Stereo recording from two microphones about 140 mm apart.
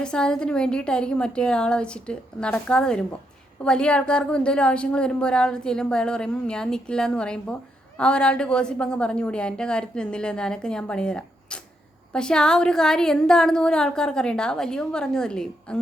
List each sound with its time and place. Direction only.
0.0 s a woman's voice: 5° left (ahead or behind)